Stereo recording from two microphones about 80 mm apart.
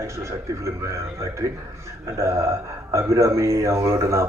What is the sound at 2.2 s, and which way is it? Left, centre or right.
Speech, right.